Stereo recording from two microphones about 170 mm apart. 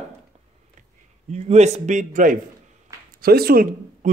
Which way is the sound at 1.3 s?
40° right (ahead or behind).